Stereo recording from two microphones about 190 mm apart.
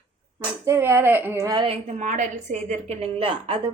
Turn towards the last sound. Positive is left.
turn(degrees=-30)  # may be behind; listen again after turning